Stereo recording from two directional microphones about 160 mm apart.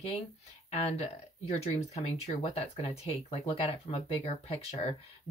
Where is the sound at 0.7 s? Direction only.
40° left (ahead or behind).